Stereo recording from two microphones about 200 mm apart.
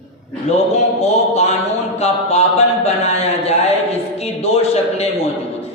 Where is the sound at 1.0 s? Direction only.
30° left (ahead or behind).